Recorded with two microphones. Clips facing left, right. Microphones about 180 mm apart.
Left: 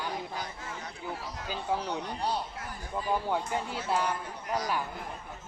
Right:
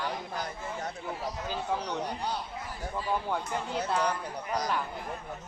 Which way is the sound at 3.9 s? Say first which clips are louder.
Even; 5° left (ahead or behind).